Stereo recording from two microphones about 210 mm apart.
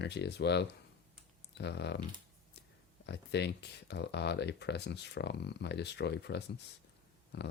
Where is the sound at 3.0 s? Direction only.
55° left (ahead or behind).